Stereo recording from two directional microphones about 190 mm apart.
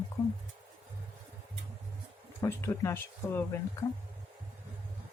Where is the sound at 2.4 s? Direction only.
15° left (ahead or behind).